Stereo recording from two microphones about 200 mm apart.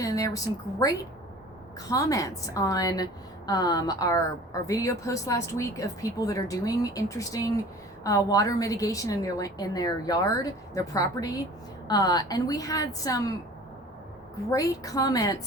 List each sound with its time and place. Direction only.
0.0 s a woman's voice: 15° left (ahead or behind)
14.5 s a woman's voice: 15° left (ahead or behind)